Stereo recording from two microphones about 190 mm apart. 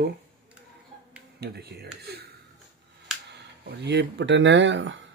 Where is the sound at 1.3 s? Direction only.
60° right (ahead or behind).